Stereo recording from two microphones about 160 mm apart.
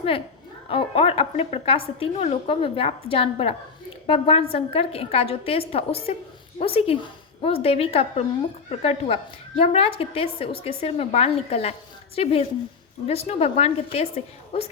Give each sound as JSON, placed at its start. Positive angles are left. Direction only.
{"t": 0.7, "sound": "a woman's voice", "side_deg": 35}